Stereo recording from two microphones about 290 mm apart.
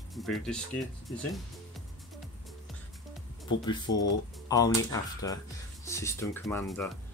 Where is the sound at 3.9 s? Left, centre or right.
Left.